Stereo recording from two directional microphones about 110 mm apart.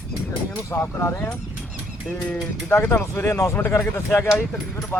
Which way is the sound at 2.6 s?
20° left (ahead or behind).